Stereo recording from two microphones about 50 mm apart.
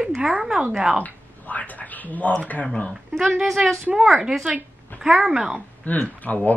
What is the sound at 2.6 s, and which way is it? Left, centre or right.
Speech, centre.